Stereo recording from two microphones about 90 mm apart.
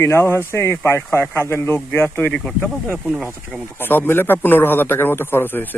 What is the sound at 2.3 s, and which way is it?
Speech, 10° left (ahead or behind).